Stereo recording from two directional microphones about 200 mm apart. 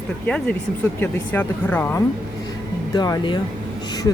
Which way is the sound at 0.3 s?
5° left (ahead or behind).